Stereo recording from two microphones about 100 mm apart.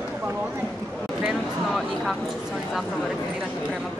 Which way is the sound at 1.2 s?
Centre (ahead or behind).